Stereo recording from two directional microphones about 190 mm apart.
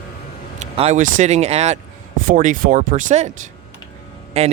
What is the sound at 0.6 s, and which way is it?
Speech, 35° right (ahead or behind).